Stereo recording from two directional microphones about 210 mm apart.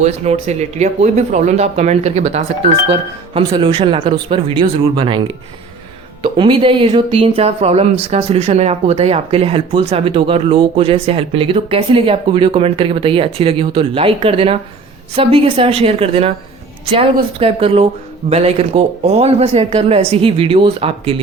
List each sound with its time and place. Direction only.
0.0 s speech: 30° right (ahead or behind)
6.2 s speech: 25° right (ahead or behind)